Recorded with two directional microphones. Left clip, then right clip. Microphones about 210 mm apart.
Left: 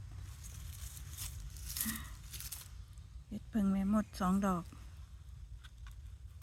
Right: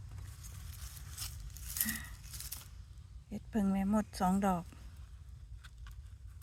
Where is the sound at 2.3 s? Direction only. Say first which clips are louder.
Left 1 dB; 5° right (ahead or behind).